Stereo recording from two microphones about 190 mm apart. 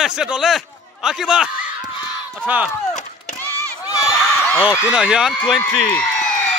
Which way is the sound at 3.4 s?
20° left (ahead or behind).